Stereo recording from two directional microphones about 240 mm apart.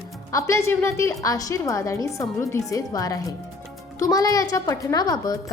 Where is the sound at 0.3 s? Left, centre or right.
Centre.